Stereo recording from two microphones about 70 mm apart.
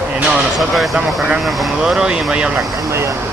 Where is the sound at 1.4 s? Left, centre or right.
Centre.